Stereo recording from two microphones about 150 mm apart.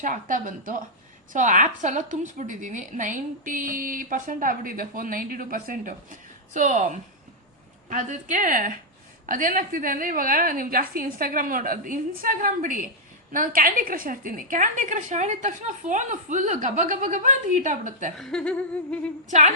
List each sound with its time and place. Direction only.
0.0 s a woman's voice: 65° right (ahead or behind)
18.2 s humming: 5° left (ahead or behind)
19.3 s a woman's voice: 50° right (ahead or behind)